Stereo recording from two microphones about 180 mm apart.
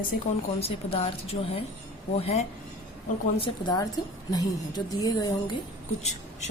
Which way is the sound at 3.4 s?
25° left (ahead or behind).